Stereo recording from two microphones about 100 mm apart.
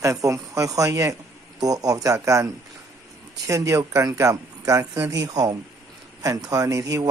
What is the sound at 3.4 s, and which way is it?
Speech, 30° right (ahead or behind).